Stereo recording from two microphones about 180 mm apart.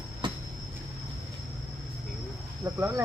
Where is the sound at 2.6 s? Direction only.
15° right (ahead or behind).